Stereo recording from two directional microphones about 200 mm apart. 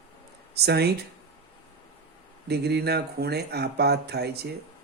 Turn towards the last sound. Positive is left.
turn(degrees=-55)  # may be behind; listen again after turning